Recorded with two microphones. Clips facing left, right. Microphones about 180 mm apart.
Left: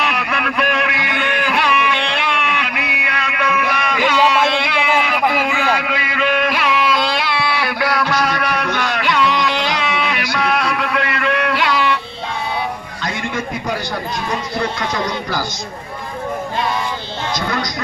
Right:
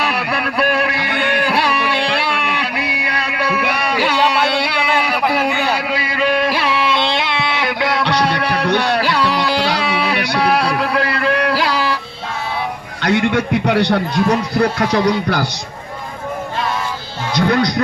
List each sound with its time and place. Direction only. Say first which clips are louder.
0.0 s a sound: right 1 dB; 35° right (ahead or behind)
8.2 s music: right 2 dB; 30° right (ahead or behind)
13.0 s a man's voice: right 9 dB; 70° right (ahead or behind)
17.3 s speech: right 8 dB; 60° right (ahead or behind)